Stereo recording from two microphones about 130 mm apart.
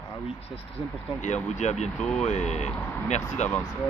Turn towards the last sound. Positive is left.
turn(degrees=65)  # may be behind; listen again after turning